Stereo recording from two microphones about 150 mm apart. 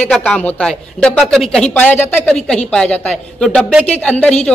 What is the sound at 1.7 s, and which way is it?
A woman's voice, 10° left (ahead or behind).